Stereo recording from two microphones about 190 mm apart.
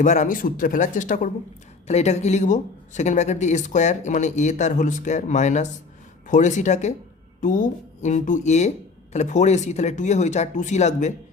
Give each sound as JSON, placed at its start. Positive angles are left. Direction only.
{"t": 0.0, "sound": "a woman's voice", "side_deg": 40}